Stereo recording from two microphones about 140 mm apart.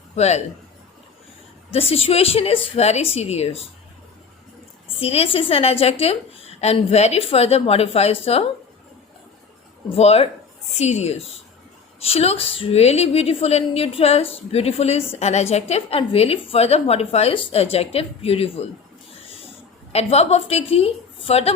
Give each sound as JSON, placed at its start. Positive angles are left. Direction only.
{"t": 0.2, "sound": "a woman's voice", "side_deg": 50}
{"t": 1.7, "sound": "a woman's voice", "side_deg": 45}
{"t": 4.9, "sound": "a woman's voice", "side_deg": 45}
{"t": 9.9, "sound": "a woman's voice", "side_deg": 45}
{"t": 19.9, "sound": "a woman's voice", "side_deg": 50}